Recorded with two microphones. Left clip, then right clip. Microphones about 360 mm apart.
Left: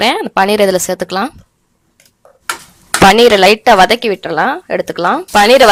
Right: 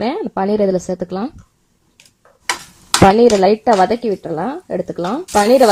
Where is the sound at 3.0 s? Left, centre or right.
Left.